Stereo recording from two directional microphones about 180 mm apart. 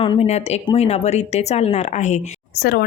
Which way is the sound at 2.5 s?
60° left (ahead or behind).